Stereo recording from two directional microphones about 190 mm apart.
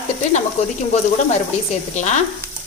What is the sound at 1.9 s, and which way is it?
Speech, 40° left (ahead or behind).